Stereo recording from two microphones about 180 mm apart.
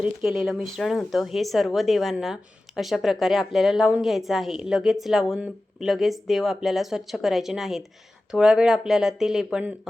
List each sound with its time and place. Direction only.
0.0 s speech: centre (ahead or behind)